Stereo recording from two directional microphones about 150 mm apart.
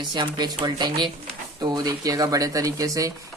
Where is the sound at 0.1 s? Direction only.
30° right (ahead or behind).